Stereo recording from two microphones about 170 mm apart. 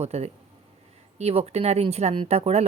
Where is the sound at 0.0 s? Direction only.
40° right (ahead or behind).